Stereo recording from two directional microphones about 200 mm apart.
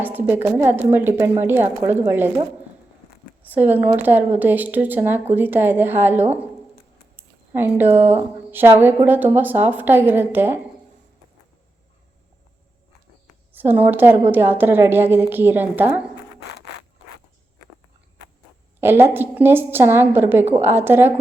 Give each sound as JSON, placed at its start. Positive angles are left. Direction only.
{"t": 0.0, "sound": "a woman's voice", "side_deg": -10}
{"t": 3.4, "sound": "a woman's voice", "side_deg": -10}
{"t": 7.2, "sound": "a sound", "side_deg": -10}
{"t": 8.4, "sound": "a woman's voice", "side_deg": -10}
{"t": 13.5, "sound": "a woman's voice", "side_deg": -10}
{"t": 18.8, "sound": "a woman's voice", "side_deg": -10}